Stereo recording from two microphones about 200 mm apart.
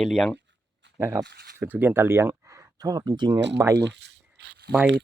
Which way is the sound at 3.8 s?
60° right (ahead or behind).